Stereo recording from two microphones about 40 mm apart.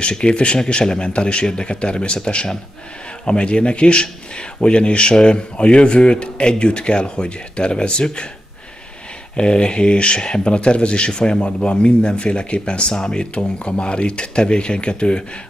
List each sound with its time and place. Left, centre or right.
0.0 s a man's voice: left
9.4 s speech: left